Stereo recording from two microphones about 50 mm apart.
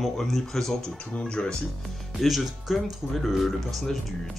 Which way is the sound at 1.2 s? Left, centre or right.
Centre.